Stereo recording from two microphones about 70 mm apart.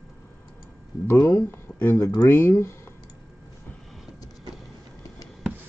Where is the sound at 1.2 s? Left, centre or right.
Left.